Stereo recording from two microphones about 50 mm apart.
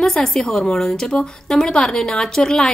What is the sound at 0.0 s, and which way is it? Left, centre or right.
A woman's voice, centre.